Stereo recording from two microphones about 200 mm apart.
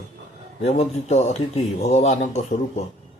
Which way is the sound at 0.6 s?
35° left (ahead or behind).